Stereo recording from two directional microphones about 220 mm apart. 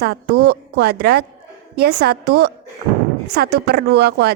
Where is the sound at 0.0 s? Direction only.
45° right (ahead or behind).